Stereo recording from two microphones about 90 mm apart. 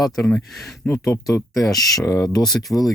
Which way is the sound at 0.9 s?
35° left (ahead or behind).